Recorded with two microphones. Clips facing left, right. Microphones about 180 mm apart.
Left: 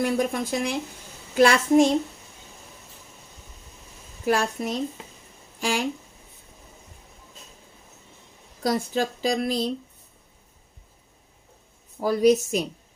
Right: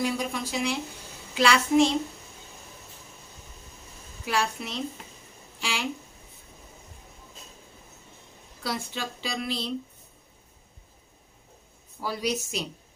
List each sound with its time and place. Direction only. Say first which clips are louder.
0.0 s speech: left 5 dB; 50° left (ahead or behind)
4.3 s speech: left 5 dB; 45° left (ahead or behind)
8.6 s speech: left 9 dB; 40° left (ahead or behind)
11.9 s speech: left 11 dB; 45° left (ahead or behind)